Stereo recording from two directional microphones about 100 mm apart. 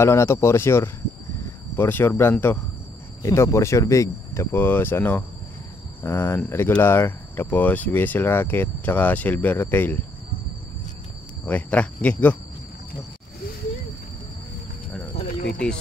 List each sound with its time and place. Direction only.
0.0 s speech: 25° left (ahead or behind)
11.4 s speech: 15° left (ahead or behind)